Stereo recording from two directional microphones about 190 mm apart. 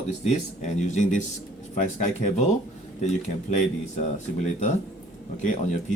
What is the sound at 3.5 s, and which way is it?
Speech, 40° left (ahead or behind).